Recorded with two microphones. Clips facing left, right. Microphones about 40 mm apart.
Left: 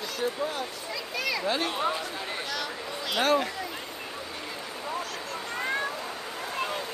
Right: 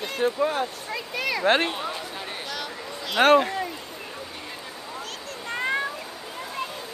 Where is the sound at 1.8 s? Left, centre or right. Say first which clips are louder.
Left 3 dB; centre.